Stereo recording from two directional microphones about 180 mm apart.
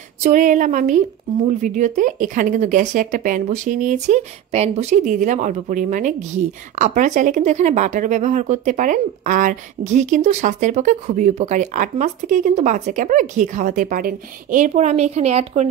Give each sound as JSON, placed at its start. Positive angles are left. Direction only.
{"t": 0.2, "sound": "speech", "side_deg": -45}